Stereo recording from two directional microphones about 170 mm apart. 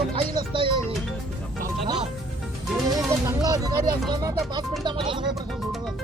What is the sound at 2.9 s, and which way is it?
Speech, 20° right (ahead or behind).